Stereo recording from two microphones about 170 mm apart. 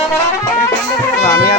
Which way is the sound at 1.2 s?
20° left (ahead or behind).